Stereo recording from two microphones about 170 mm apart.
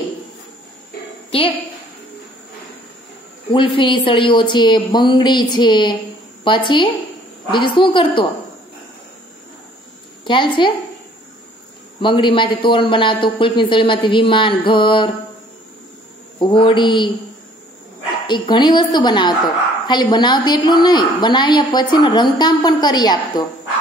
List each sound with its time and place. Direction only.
3.4 s a woman's voice: 30° left (ahead or behind)
10.2 s a woman's voice: 30° left (ahead or behind)
12.0 s a woman's voice: 30° left (ahead or behind)
16.3 s a woman's voice: 30° left (ahead or behind)
18.2 s a woman's voice: 30° left (ahead or behind)